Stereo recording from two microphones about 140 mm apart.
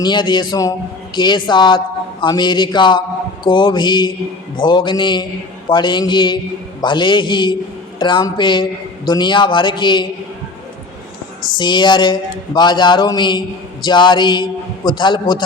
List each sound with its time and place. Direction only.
0.0 s speech: 30° left (ahead or behind)
11.5 s speech: 35° left (ahead or behind)